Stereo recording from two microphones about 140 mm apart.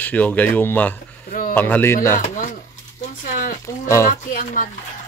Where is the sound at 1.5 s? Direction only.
15° left (ahead or behind).